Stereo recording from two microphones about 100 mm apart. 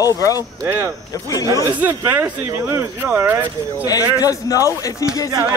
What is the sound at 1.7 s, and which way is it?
Speech, 15° right (ahead or behind).